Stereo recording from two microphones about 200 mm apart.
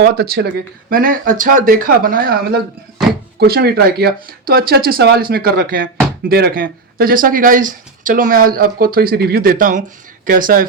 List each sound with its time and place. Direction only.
0.0 s speech: 50° right (ahead or behind)